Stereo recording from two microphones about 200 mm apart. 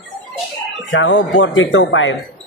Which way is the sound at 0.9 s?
65° left (ahead or behind).